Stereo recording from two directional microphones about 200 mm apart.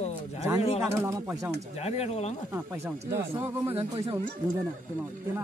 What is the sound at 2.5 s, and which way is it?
Speech, 10° right (ahead or behind).